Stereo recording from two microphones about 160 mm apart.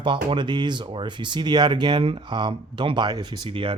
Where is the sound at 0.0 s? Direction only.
30° right (ahead or behind).